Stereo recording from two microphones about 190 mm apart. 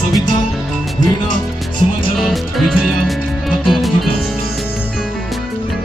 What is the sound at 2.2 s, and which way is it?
Music, centre (ahead or behind).